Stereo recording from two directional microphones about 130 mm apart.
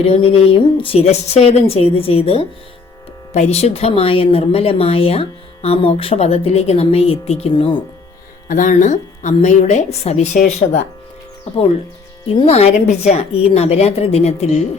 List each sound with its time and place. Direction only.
0.1 s speech: 45° left (ahead or behind)
7.5 s speech: 40° left (ahead or behind)
8.4 s a woman's voice: 85° left; by 10.2 s 55° left (ahead or behind)
10.3 s speech: 90° left
12.3 s speech: 50° left (ahead or behind)